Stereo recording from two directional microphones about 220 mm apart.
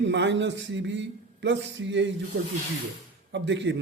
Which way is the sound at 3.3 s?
55° right (ahead or behind).